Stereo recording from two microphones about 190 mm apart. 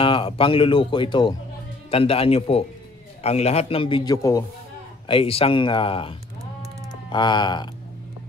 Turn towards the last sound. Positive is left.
turn(degrees=25)  # may be behind; listen again after turning